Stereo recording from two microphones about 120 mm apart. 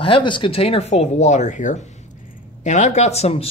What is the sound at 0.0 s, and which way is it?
Speech, 45° left (ahead or behind).